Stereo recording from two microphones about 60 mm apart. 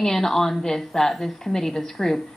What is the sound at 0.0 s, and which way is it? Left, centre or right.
A woman's voice, centre.